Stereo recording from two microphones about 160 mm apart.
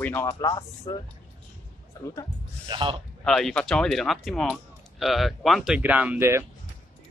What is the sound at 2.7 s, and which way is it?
Speech, 30° right (ahead or behind).